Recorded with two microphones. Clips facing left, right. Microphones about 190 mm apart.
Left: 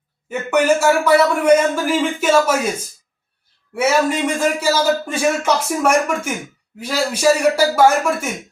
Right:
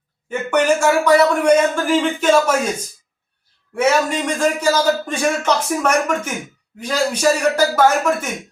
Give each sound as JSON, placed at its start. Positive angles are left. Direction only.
{"t": 0.3, "sound": "a man's voice", "side_deg": 5}